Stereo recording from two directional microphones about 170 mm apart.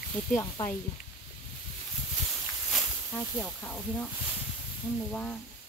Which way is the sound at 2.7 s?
5° left (ahead or behind).